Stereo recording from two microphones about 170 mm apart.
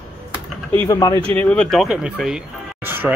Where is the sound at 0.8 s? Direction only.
20° left (ahead or behind).